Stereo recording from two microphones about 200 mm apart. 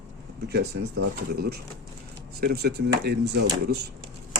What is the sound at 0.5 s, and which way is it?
Speech, 55° right (ahead or behind).